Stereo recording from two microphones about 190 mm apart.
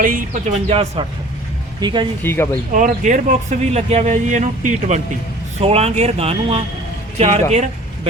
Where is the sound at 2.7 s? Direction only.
45° right (ahead or behind).